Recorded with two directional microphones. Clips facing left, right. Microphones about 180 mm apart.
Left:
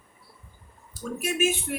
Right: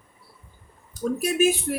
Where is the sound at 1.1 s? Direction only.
35° right (ahead or behind).